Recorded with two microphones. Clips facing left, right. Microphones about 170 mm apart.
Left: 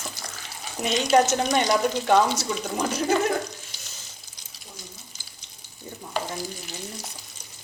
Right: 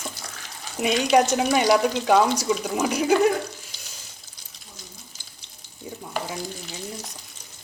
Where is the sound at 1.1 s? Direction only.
10° right (ahead or behind).